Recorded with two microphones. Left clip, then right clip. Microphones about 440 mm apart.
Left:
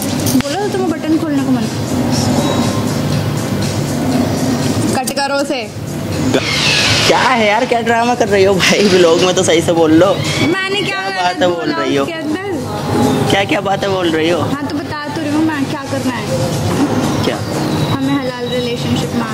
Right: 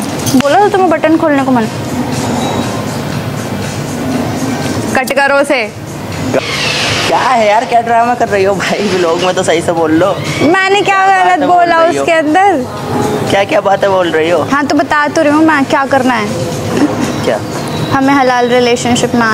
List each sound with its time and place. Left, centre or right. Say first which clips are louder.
4.9 s speech: right 10 dB; right
7.2 s speech: right 3 dB; left; by 10.1 s centre
10.5 s speech: right 8 dB; right
13.3 s speech: right 5 dB; centre
14.5 s speech: right 10 dB; right
18.1 s speech: right 10 dB; right